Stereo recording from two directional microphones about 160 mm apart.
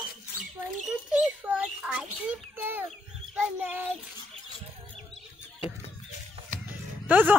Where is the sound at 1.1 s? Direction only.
5° right (ahead or behind).